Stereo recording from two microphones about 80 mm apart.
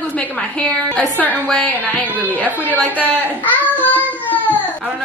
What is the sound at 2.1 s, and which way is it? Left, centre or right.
Speech, right.